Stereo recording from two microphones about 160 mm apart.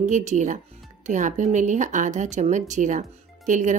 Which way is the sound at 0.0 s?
45° right (ahead or behind).